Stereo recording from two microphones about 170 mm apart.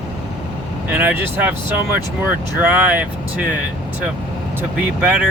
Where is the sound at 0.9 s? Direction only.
10° right (ahead or behind).